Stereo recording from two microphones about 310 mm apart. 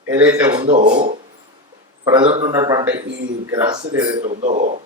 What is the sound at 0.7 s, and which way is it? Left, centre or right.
A man's voice, right.